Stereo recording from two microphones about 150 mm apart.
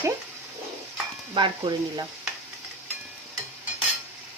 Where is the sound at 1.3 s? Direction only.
30° right (ahead or behind).